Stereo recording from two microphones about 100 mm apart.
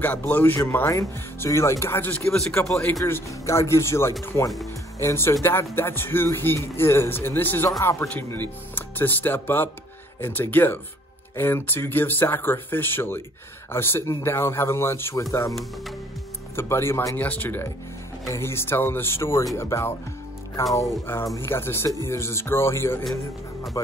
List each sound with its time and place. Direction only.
0.0 s speech: 15° left (ahead or behind)
2.2 s speech: 5° left (ahead or behind)
3.1 s speech: 25° left (ahead or behind)
16.5 s speech: 25° left (ahead or behind)